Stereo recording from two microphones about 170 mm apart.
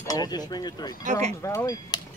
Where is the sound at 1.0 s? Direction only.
50° right (ahead or behind).